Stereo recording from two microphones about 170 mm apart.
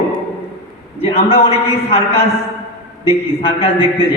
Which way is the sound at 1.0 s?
35° left (ahead or behind).